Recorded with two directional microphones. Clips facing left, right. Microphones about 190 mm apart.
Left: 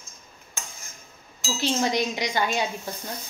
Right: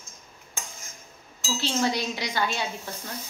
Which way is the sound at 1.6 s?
15° left (ahead or behind).